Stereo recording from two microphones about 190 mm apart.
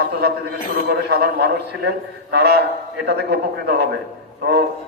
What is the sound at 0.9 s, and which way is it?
A man's voice, 60° right (ahead or behind).